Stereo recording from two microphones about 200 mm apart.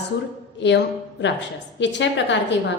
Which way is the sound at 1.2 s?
60° left (ahead or behind).